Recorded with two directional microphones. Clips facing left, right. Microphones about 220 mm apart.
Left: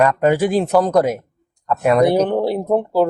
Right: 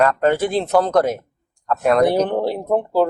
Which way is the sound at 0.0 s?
10° left (ahead or behind).